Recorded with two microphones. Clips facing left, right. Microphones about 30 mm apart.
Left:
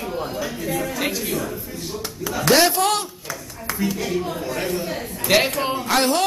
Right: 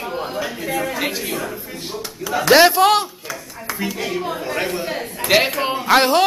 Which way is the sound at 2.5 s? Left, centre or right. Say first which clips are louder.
Right 5 dB; right.